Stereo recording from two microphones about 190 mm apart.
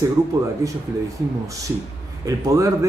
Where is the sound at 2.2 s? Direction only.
15° right (ahead or behind).